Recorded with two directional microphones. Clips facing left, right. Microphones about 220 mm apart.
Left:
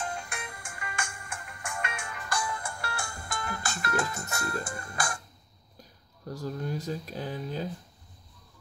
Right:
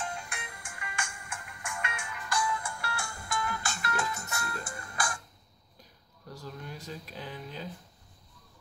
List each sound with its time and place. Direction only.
0.3 s music: 40° left (ahead or behind)
6.2 s speech: 45° left (ahead or behind)